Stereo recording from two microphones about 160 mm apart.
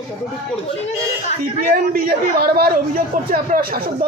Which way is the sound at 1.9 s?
65° right (ahead or behind).